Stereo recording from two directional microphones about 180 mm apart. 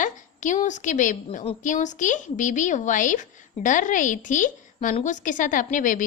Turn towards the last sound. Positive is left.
turn(degrees=45)  # may be behind; listen again after turning